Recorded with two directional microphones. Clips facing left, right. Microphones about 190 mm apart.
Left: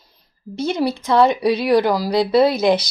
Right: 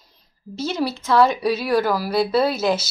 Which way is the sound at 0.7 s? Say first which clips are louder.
Left 1 dB; 15° left (ahead or behind).